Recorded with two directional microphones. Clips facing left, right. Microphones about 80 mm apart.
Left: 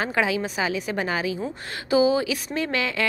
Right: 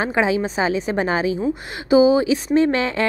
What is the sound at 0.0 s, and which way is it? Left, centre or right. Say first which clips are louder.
A woman's voice: right 5 dB; right.